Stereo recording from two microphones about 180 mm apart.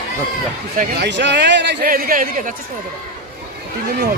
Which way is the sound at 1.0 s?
75° right (ahead or behind).